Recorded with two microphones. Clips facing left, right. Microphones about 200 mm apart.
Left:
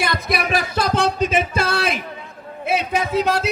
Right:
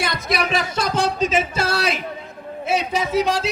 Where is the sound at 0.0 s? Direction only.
60° left (ahead or behind).